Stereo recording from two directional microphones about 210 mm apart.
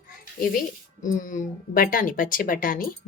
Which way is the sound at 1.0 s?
40° left (ahead or behind).